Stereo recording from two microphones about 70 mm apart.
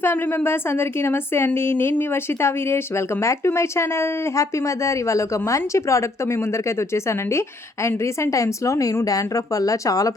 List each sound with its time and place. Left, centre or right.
0.0 s a woman's voice: left